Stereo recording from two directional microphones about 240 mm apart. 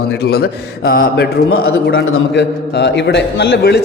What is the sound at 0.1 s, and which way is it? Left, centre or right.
Speech, left.